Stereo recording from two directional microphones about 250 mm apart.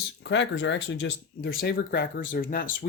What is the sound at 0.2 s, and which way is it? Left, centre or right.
Speech, left.